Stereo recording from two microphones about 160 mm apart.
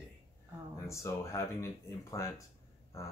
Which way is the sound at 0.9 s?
20° left (ahead or behind).